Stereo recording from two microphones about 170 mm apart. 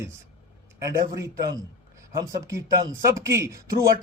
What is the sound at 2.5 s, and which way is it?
A man's voice, 20° right (ahead or behind).